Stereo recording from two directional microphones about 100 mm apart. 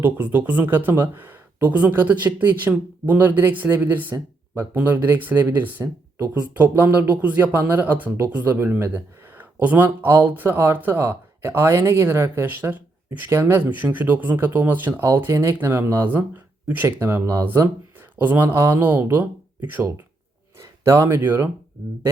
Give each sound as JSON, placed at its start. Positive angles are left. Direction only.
{"t": 0.0, "sound": "speech", "side_deg": -20}
{"t": 1.1, "sound": "a sound", "side_deg": -20}
{"t": 2.0, "sound": "speech", "side_deg": -15}
{"t": 5.8, "sound": "speech", "side_deg": -30}
{"t": 6.3, "sound": "speech", "side_deg": -15}
{"t": 20.6, "sound": "speech", "side_deg": -30}